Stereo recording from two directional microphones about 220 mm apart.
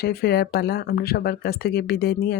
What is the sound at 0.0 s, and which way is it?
Speech, 45° left (ahead or behind).